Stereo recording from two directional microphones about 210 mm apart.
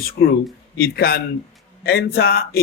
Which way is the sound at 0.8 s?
45° left (ahead or behind).